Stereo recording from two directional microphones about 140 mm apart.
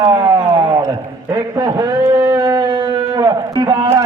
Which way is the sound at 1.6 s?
30° right (ahead or behind).